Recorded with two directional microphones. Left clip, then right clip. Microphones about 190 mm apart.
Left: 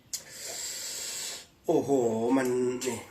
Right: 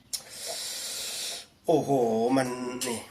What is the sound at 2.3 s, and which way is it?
Speech, 20° right (ahead or behind).